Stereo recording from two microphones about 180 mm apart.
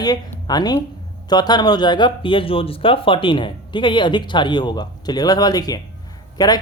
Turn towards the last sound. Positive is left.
turn(degrees=20)  # may be behind; listen again after turning